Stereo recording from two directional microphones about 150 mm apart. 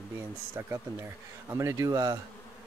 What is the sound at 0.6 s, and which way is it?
Speech, 20° right (ahead or behind).